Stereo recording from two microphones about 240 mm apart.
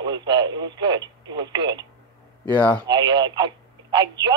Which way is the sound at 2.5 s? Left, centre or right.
Centre.